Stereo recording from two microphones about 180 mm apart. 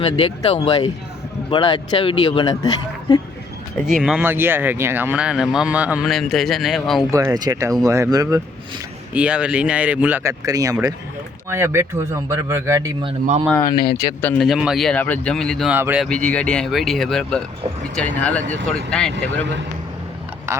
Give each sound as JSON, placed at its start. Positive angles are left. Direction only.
{"t": 0.0, "sound": "a man's voice", "side_deg": 30}
{"t": 4.0, "sound": "speech", "side_deg": -5}
{"t": 7.1, "sound": "speech", "side_deg": -20}
{"t": 9.1, "sound": "speech", "side_deg": -5}
{"t": 14.2, "sound": "speech", "side_deg": 5}
{"t": 16.0, "sound": "speech", "side_deg": 5}
{"t": 20.5, "sound": "speech", "side_deg": -15}